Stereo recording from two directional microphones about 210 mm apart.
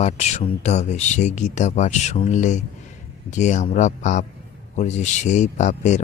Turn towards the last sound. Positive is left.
turn(degrees=35)  # may be behind; listen again after turning